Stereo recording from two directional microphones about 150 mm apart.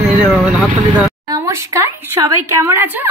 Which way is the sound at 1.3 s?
20° right (ahead or behind).